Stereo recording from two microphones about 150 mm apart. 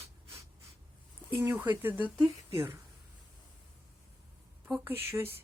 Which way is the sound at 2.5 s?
15° right (ahead or behind).